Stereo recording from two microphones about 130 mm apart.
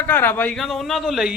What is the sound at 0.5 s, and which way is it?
Speech, centre (ahead or behind).